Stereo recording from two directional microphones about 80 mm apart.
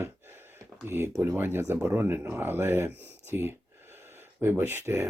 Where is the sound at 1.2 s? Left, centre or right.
Right.